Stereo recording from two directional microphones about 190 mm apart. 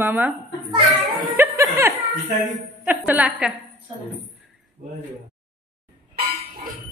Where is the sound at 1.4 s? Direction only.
15° right (ahead or behind).